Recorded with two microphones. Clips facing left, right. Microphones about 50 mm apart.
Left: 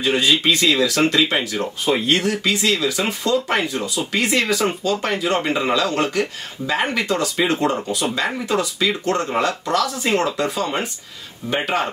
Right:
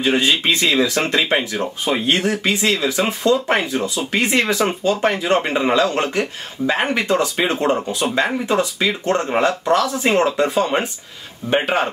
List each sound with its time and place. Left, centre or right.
0.0 s speech: right